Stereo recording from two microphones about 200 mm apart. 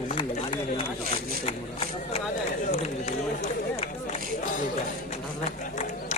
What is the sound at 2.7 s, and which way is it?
Run, 35° left (ahead or behind).